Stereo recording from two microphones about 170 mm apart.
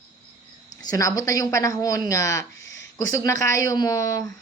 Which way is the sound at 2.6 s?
90° left.